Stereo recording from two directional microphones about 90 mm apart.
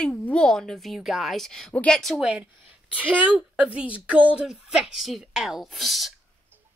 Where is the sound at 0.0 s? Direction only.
15° left (ahead or behind).